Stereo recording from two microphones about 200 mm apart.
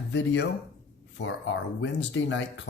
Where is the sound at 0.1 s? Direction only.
60° left (ahead or behind).